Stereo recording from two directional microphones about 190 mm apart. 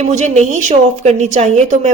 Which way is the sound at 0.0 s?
35° right (ahead or behind).